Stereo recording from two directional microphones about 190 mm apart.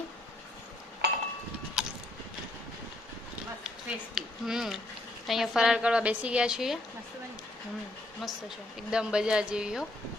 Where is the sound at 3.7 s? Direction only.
Centre (ahead or behind).